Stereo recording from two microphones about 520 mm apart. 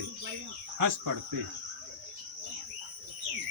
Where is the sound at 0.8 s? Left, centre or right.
Right.